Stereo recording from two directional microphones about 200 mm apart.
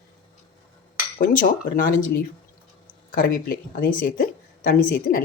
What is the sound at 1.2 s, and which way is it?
Speech, 40° left (ahead or behind).